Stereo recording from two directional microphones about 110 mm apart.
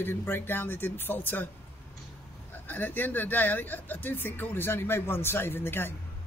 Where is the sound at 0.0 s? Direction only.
20° left (ahead or behind).